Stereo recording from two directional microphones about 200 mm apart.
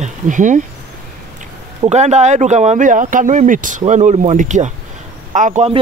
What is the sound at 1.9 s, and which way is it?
Speech, 35° right (ahead or behind).